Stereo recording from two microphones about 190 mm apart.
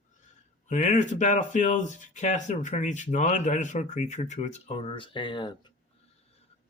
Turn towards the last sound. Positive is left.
turn(degrees=25)  # may be behind; listen again after turning